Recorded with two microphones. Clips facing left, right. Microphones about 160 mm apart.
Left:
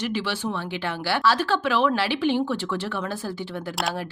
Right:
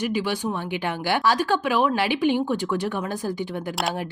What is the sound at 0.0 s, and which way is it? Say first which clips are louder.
Speech: right 2 dB; 15° right (ahead or behind).